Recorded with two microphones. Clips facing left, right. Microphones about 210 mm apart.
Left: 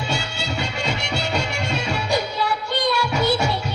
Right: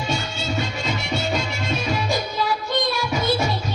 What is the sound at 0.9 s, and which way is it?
Music, 70° left (ahead or behind).